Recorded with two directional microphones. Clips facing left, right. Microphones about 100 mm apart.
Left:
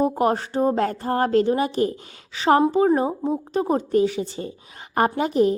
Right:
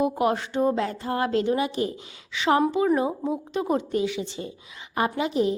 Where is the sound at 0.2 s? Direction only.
40° left (ahead or behind).